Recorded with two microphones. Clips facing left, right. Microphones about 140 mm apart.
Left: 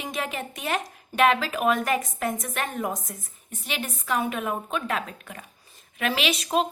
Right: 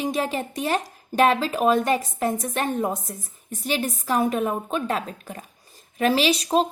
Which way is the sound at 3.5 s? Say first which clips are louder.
Right 7 dB; 40° right (ahead or behind).